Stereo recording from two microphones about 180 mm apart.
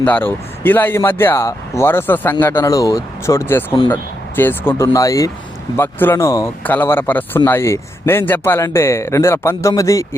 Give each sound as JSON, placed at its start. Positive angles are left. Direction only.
{"t": 0.0, "sound": "speech", "side_deg": 10}